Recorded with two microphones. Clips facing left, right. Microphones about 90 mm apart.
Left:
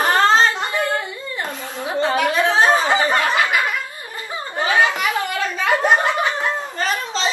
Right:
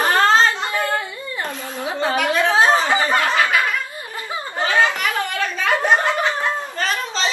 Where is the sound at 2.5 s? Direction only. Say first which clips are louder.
Right 1 dB; 20° right (ahead or behind).